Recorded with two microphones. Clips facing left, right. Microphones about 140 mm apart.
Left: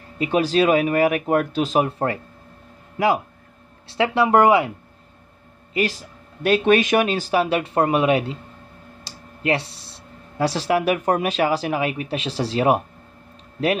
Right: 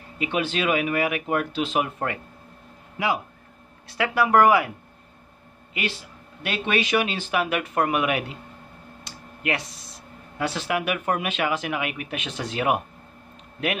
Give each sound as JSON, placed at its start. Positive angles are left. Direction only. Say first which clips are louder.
{"t": 0.2, "sound": "speech", "louder": "left 7 dB", "side_deg": 40}
{"t": 3.8, "sound": "speech", "louder": "left 4 dB", "side_deg": 30}
{"t": 5.7, "sound": "speech", "louder": "left 7 dB", "side_deg": 40}